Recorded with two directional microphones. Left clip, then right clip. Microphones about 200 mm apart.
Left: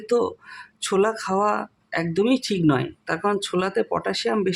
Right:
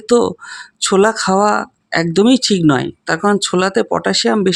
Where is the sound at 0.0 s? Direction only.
35° right (ahead or behind).